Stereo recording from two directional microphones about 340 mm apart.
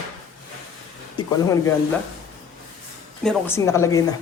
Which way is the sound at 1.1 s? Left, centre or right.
Centre.